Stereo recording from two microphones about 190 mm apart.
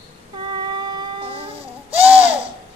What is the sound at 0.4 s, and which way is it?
Music, 25° right (ahead or behind).